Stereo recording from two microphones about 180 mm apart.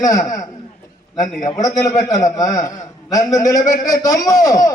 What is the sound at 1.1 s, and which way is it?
Speech, 45° left (ahead or behind).